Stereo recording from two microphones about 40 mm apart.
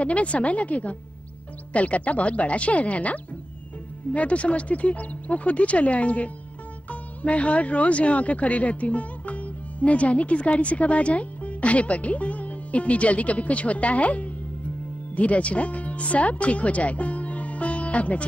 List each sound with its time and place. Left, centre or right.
0.0 s speech: left